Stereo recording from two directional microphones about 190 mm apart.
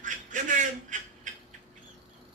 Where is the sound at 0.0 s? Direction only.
40° right (ahead or behind).